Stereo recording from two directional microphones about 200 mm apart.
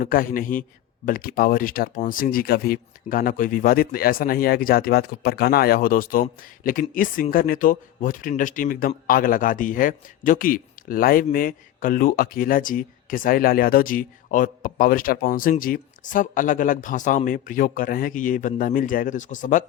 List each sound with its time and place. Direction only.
0.0 s speech: 45° left (ahead or behind)